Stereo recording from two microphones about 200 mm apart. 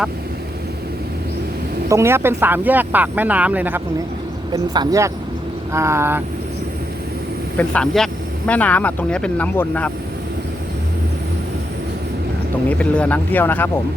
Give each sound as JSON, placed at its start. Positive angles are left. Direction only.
{"t": 1.9, "sound": "speech", "side_deg": -15}
{"t": 4.5, "sound": "speech", "side_deg": -20}
{"t": 7.5, "sound": "speech", "side_deg": 5}
{"t": 12.6, "sound": "speech", "side_deg": 5}